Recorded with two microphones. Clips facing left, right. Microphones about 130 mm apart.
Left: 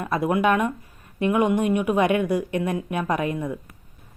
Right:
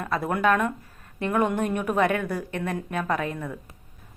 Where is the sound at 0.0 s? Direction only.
15° left (ahead or behind).